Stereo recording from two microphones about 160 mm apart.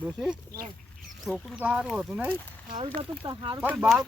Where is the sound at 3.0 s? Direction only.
30° right (ahead or behind).